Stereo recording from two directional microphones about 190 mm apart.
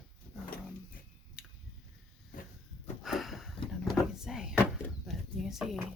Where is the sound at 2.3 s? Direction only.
45° left (ahead or behind).